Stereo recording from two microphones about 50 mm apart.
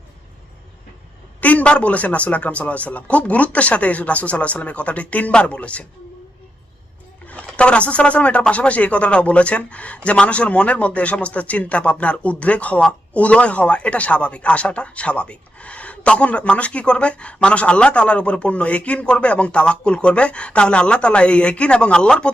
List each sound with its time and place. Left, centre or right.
1.4 s speech: left
7.3 s speech: left